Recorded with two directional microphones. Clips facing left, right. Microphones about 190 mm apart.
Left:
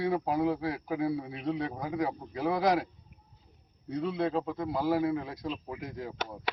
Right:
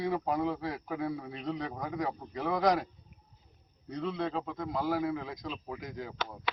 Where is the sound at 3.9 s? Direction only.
10° left (ahead or behind).